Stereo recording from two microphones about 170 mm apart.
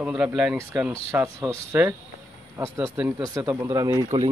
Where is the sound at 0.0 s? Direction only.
5° right (ahead or behind).